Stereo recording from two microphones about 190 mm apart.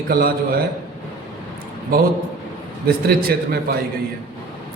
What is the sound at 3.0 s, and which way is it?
Speech, 55° right (ahead or behind).